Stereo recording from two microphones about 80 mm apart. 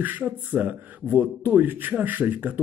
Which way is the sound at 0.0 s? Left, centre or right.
Right.